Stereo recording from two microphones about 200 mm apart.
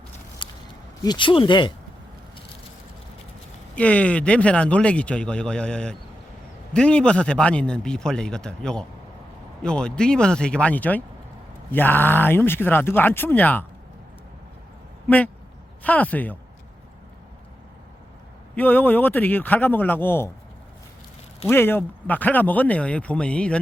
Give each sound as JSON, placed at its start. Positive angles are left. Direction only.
{"t": 0.4, "sound": "a sound", "side_deg": 25}
{"t": 1.0, "sound": "speech", "side_deg": 25}
{"t": 3.8, "sound": "a man's voice", "side_deg": 5}
{"t": 15.0, "sound": "speech", "side_deg": 10}
{"t": 18.5, "sound": "speech", "side_deg": 10}
{"t": 21.4, "sound": "speech", "side_deg": 10}